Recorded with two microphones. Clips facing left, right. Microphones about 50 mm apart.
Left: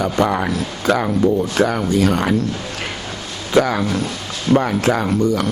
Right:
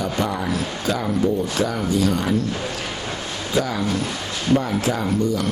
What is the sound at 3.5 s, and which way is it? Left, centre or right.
A man's voice, left.